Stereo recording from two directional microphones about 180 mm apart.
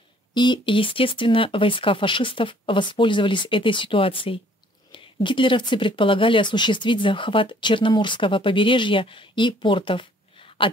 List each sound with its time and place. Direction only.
0.3 s speech: 25° left (ahead or behind)